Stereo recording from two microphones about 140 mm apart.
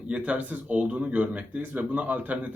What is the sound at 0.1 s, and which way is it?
Speech, 10° right (ahead or behind).